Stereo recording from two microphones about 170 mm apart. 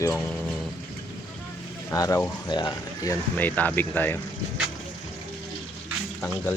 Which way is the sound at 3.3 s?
10° left (ahead or behind).